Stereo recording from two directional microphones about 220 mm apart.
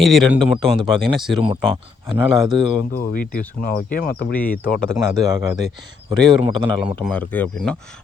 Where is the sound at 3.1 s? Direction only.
40° left (ahead or behind).